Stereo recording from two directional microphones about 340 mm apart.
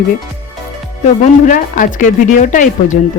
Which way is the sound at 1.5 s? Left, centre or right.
Left.